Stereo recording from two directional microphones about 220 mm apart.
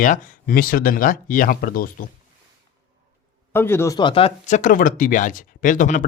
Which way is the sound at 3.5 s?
10° left (ahead or behind).